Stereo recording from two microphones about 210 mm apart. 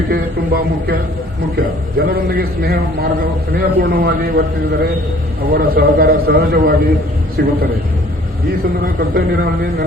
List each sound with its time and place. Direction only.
0.1 s a man's voice: 45° right (ahead or behind)
8.4 s a man's voice: 45° right (ahead or behind)